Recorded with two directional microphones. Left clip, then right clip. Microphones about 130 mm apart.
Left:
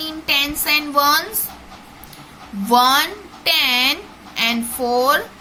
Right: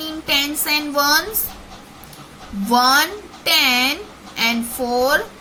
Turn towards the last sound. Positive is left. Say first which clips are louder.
# left 1 dB
turn(degrees=20)  # may be behind; listen again after turning